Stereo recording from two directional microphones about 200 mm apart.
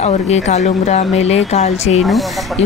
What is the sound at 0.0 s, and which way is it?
A woman's voice, 35° left (ahead or behind).